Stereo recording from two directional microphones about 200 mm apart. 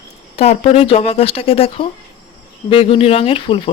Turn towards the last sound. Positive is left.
turn(degrees=25)  # may be behind; listen again after turning